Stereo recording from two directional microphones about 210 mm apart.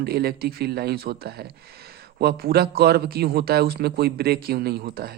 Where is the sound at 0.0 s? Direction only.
50° right (ahead or behind).